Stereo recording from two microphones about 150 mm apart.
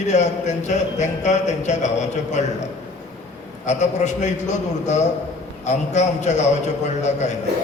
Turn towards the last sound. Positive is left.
turn(degrees=50)  # may be behind; listen again after turning